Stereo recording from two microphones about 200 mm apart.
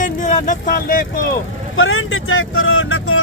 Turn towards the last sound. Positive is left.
turn(degrees=90)